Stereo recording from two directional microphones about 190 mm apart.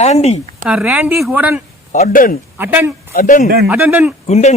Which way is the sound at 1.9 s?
45° left (ahead or behind).